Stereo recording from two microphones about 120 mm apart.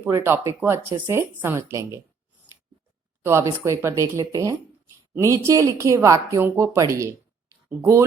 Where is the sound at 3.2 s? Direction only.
20° right (ahead or behind).